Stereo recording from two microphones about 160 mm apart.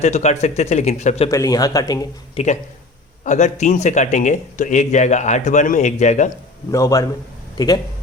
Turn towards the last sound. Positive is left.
turn(degrees=25)  # may be behind; listen again after turning